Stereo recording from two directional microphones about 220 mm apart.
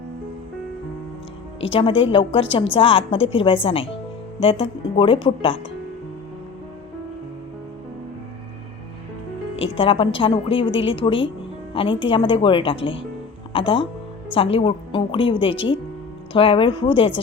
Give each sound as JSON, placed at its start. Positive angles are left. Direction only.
{"t": 1.6, "sound": "a woman's voice", "side_deg": 25}
{"t": 9.6, "sound": "a woman's voice", "side_deg": 25}